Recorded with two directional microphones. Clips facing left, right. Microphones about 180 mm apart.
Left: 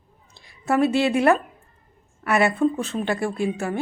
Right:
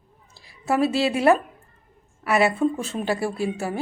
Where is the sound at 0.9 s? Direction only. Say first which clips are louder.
Left 1 dB; 25° right (ahead or behind).